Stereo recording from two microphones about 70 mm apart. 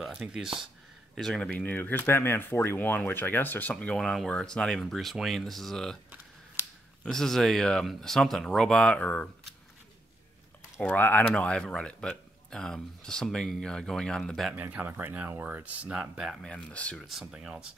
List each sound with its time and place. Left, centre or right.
0.3 s speech: centre
1.1 s speech: centre; by 3.7 s left
3.8 s speech: centre
6.6 s a sound: right
7.0 s speech: centre
10.8 s speech: left
11.2 s speech: centre
14.5 s speech: right
16.2 s speech: centre
16.4 s speech: centre
17.0 s speech: centre